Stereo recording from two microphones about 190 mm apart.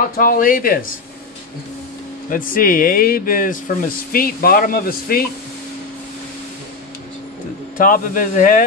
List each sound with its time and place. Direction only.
0.2 s speech: 45° left (ahead or behind)
2.3 s speech: 45° left (ahead or behind)
7.7 s speech: 45° left (ahead or behind)